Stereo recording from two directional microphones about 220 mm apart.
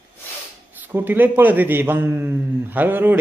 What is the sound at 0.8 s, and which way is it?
A man's voice, 10° right (ahead or behind).